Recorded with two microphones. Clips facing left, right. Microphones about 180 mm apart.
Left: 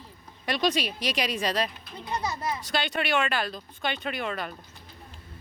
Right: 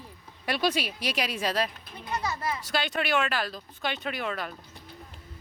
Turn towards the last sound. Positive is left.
turn(degrees=0)  # may be behind; listen again after turning